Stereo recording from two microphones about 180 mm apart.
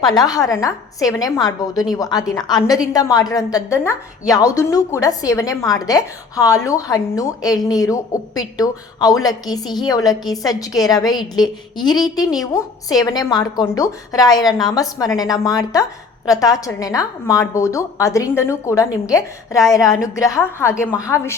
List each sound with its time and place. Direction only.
0.2 s a woman's voice: 20° left (ahead or behind)